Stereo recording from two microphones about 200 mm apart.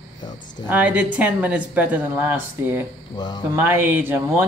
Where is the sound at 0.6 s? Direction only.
5° right (ahead or behind).